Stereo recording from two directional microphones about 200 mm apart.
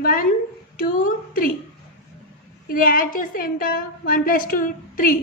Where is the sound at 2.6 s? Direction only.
45° left (ahead or behind).